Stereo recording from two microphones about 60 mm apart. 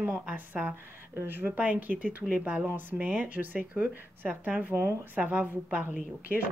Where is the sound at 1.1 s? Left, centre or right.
Right.